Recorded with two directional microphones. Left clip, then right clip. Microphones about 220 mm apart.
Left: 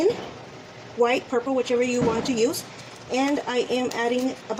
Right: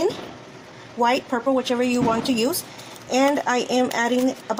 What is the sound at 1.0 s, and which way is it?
Speech, 60° right (ahead or behind).